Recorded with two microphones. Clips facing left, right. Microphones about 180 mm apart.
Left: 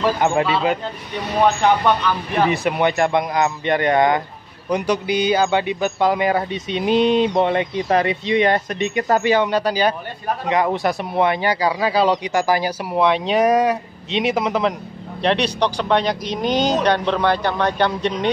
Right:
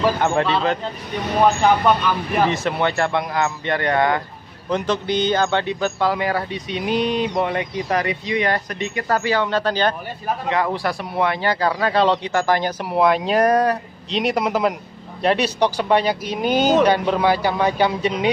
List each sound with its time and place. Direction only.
0.2 s speech: 5° left (ahead or behind)
2.5 s a man's voice: 15° left (ahead or behind)
10.5 s speech: 20° left (ahead or behind)
12.9 s speech: 5° right (ahead or behind)